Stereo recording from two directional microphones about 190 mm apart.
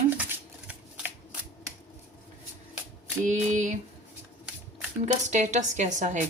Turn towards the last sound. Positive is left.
turn(degrees=-40)  # may be behind; listen again after turning